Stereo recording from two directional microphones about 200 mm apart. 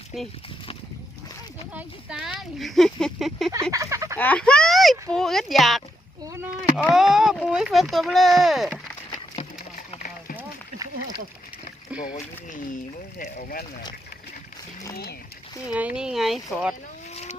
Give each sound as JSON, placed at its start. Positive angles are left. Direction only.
{"t": 1.7, "sound": "speech", "side_deg": -5}
{"t": 3.5, "sound": "speech", "side_deg": -15}
{"t": 4.2, "sound": "speech", "side_deg": 5}
{"t": 6.2, "sound": "a sound", "side_deg": -15}
{"t": 6.9, "sound": "speech", "side_deg": 0}
{"t": 9.0, "sound": "a sound", "side_deg": 25}
{"t": 10.3, "sound": "a sound", "side_deg": -20}
{"t": 11.9, "sound": "speech", "side_deg": 40}
{"t": 15.7, "sound": "speech", "side_deg": -5}